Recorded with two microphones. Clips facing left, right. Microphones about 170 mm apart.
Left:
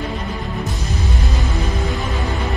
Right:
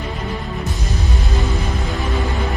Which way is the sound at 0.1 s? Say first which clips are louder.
Even; centre (ahead or behind).